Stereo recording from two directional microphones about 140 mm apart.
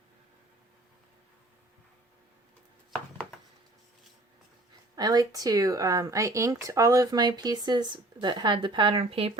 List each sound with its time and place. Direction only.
4.9 s speech: 30° right (ahead or behind); by 9.4 s 45° right (ahead or behind)